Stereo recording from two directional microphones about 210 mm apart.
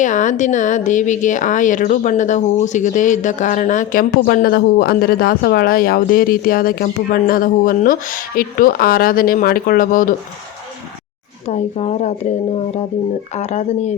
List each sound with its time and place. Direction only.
0.0 s a woman's voice: 35° left (ahead or behind)
11.4 s a woman's voice: 30° left (ahead or behind)
13.3 s a woman's voice: 30° left (ahead or behind)